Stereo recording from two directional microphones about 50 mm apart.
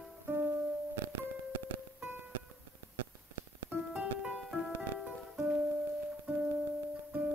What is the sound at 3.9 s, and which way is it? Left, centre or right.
Music, centre.